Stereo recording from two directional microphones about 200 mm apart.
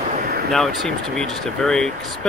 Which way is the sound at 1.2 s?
5° left (ahead or behind).